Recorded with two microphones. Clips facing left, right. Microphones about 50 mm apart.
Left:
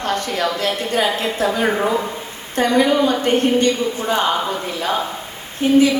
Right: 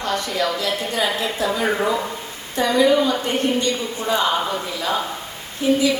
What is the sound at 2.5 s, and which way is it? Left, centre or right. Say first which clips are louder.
A woman's voice: left 1 dB; left.